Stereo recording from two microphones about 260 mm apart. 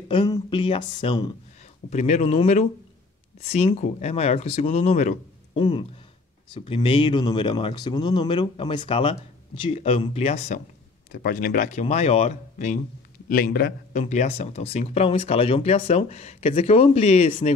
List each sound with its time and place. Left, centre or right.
0.1 s speech: centre